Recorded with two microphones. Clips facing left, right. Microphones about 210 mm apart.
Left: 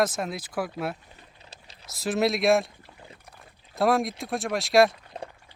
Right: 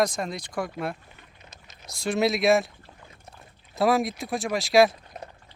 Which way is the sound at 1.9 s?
Centre (ahead or behind).